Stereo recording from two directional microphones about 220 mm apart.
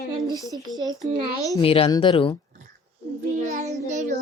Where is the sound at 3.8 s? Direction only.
35° right (ahead or behind).